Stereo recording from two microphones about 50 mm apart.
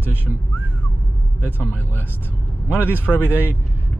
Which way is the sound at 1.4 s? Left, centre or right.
Left.